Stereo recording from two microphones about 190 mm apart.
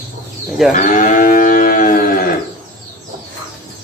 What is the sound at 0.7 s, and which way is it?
Livestock, 40° left (ahead or behind).